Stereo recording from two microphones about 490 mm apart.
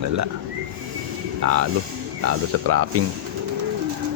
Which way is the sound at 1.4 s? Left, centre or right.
Right.